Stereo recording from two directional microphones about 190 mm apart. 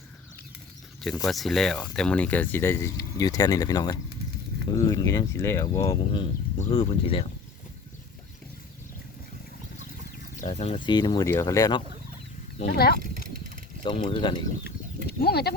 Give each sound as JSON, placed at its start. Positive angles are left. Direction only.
{"t": 1.2, "sound": "speech", "side_deg": 0}
{"t": 6.6, "sound": "speech", "side_deg": 35}
{"t": 10.3, "sound": "speech", "side_deg": 40}
{"t": 12.6, "sound": "speech", "side_deg": 55}
{"t": 13.8, "sound": "speech", "side_deg": 25}
{"t": 15.0, "sound": "speech", "side_deg": 55}